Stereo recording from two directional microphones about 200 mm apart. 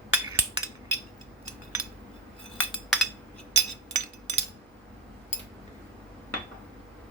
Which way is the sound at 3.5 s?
35° right (ahead or behind).